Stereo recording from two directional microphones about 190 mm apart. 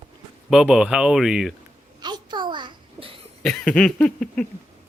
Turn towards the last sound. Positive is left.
turn(degrees=5)  # may be behind; listen again after turning